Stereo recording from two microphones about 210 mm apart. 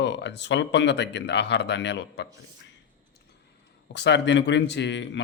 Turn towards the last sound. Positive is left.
turn(degrees=55)  # may be behind; listen again after turning